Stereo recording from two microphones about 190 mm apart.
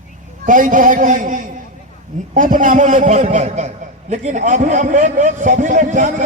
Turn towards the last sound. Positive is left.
turn(degrees=-45)  # may be behind; listen again after turning